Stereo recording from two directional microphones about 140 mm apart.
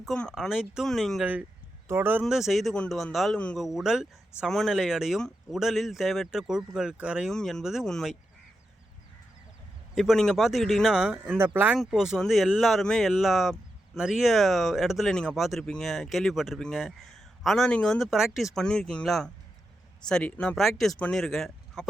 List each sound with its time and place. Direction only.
0.0 s speech: 5° left (ahead or behind)
1.2 s speech: 10° right (ahead or behind)
2.2 s speech: centre (ahead or behind)
9.9 s speech: centre (ahead or behind)